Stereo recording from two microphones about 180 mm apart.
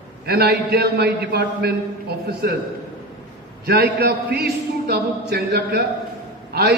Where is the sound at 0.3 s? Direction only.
60° right (ahead or behind).